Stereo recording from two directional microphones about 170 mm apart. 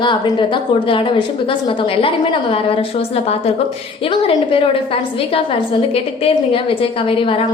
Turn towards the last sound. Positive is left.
turn(degrees=30)  # may be behind; listen again after turning